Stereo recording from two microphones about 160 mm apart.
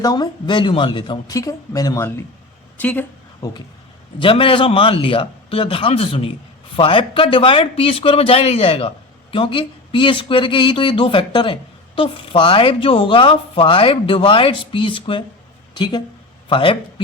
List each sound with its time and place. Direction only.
0.0 s speech: 25° left (ahead or behind)
2.7 s a woman's voice: 10° left (ahead or behind)
3.4 s speech: 25° left (ahead or behind)
4.2 s speech: 35° left (ahead or behind)